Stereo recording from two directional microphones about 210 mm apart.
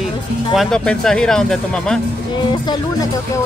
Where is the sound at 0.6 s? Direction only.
Centre (ahead or behind).